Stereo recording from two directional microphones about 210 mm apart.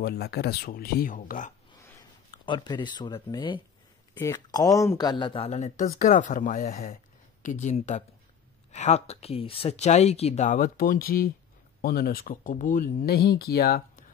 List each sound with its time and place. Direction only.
0.0 s speech: 50° left (ahead or behind)
2.3 s speech: 20° left (ahead or behind); by 14.0 s 45° left (ahead or behind)